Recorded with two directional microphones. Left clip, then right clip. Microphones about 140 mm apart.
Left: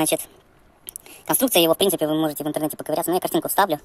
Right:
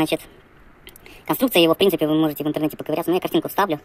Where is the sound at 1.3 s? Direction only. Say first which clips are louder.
Right 1 dB; 20° left (ahead or behind).